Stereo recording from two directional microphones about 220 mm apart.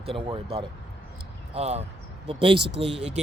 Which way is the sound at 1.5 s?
30° right (ahead or behind).